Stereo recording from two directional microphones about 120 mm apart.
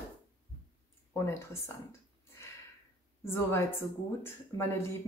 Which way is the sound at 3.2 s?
20° left (ahead or behind).